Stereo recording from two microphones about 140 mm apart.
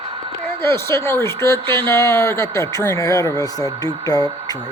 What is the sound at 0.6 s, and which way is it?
Speech, 20° left (ahead or behind).